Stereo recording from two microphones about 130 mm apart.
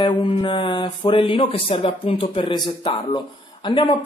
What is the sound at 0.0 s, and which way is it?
Speech, 40° left (ahead or behind).